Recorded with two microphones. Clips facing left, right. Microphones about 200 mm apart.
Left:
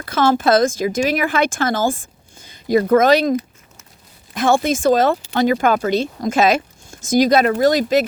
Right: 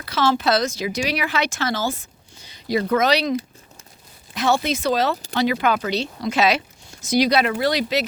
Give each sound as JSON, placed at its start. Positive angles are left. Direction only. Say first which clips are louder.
{"t": 0.0, "sound": "speech", "louder": "left 4 dB", "side_deg": 50}
{"t": 4.4, "sound": "speech", "louder": "left 4 dB", "side_deg": 50}